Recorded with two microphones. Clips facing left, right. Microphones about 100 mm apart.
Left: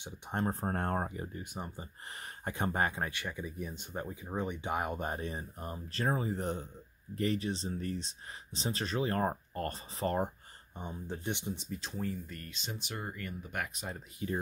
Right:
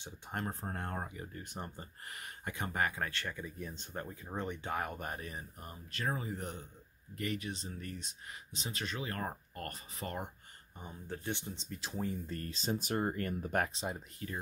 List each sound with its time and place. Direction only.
0.0 s speech: 25° left (ahead or behind)
0.6 s speech: 45° left (ahead or behind)
1.3 s speech: 10° left (ahead or behind)
2.4 s speech: 35° left (ahead or behind)
3.1 s speech: 15° left (ahead or behind); by 10.3 s 35° left (ahead or behind)
10.8 s speech: 20° left (ahead or behind)
11.9 s speech: 20° right (ahead or behind)
12.3 s speech: 35° right (ahead or behind)
14.2 s speech: 15° left (ahead or behind)